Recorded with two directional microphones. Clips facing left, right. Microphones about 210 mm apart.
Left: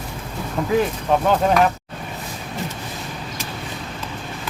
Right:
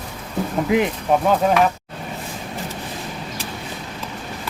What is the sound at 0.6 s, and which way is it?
Speech, 20° right (ahead or behind).